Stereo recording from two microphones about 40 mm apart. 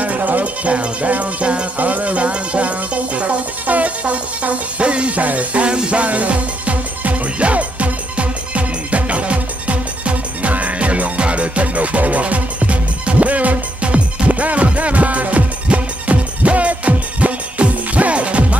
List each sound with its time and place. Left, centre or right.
0.0 s speech: right
1.8 s music: right